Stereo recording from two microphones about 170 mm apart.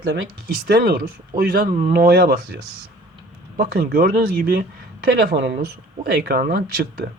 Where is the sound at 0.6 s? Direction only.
60° right (ahead or behind).